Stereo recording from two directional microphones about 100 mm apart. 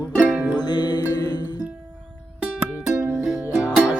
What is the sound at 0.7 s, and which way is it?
Music, 45° left (ahead or behind).